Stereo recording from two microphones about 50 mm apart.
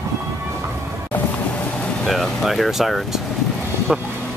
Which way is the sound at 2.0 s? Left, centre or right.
Centre.